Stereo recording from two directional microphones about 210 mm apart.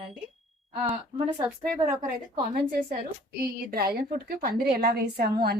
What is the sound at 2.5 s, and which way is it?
A woman's voice, 45° right (ahead or behind).